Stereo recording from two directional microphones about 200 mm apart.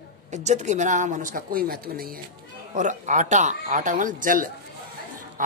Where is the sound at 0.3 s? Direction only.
35° right (ahead or behind).